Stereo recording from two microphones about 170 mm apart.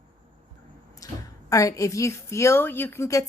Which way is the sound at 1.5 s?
20° left (ahead or behind).